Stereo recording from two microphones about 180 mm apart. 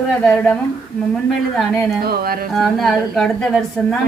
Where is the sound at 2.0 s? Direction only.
60° right (ahead or behind).